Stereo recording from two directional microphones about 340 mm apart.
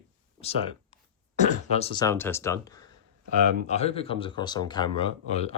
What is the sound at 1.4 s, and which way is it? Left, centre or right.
Speech, centre.